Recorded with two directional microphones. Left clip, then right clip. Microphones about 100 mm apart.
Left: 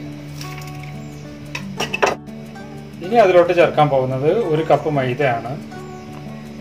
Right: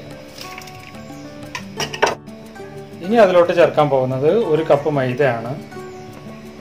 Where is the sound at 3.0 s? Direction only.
90° right; by 5.3 s 70° right (ahead or behind).